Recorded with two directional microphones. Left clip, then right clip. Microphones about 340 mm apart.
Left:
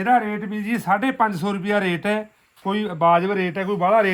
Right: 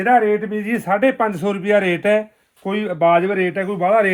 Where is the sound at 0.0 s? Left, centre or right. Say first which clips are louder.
Right 5 dB; centre.